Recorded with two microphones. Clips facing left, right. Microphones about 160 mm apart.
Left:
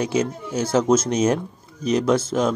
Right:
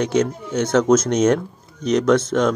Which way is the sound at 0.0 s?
5° left (ahead or behind).